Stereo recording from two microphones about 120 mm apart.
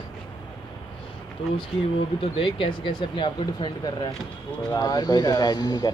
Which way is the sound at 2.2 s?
45° left (ahead or behind).